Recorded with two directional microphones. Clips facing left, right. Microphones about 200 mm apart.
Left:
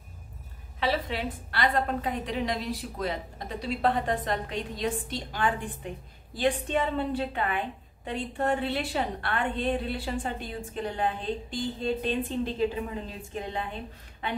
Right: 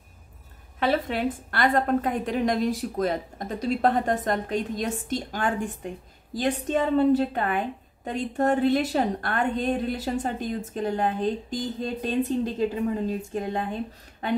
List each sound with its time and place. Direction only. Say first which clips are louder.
0.7 s a woman's voice: right 4 dB; 50° right (ahead or behind)
13.3 s a woman's voice: right 5 dB; 45° right (ahead or behind)